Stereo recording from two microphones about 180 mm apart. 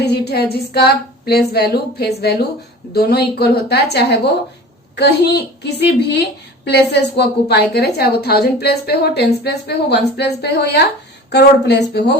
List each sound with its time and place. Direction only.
0.0 s a woman's voice: 65° left (ahead or behind)